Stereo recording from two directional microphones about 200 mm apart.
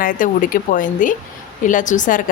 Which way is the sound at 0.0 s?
45° left (ahead or behind).